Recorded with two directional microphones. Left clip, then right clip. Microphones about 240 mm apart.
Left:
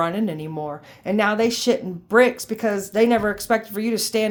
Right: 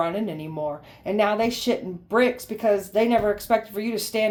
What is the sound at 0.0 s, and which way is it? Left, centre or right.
Speech, left.